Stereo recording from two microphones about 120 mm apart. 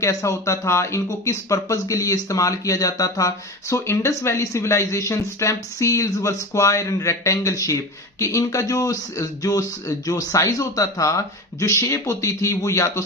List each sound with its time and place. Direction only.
0.0 s speech: 25° left (ahead or behind)